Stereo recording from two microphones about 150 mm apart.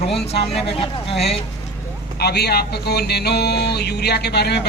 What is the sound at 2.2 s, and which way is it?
Speech, 90° left.